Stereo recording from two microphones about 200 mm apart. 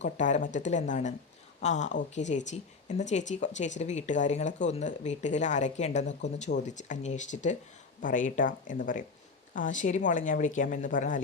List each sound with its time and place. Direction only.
0.0 s speech: 40° left (ahead or behind)